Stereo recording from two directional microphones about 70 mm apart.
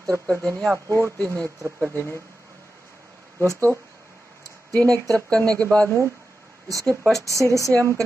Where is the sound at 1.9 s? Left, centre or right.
Left.